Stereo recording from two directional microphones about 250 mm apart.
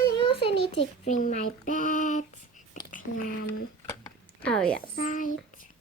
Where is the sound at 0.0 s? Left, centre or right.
Left.